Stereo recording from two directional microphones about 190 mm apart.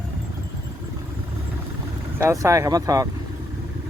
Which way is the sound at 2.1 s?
15° right (ahead or behind).